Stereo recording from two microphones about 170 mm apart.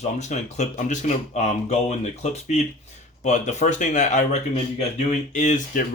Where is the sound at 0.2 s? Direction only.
45° left (ahead or behind).